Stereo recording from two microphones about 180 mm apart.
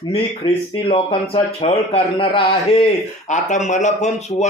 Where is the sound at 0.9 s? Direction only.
30° left (ahead or behind).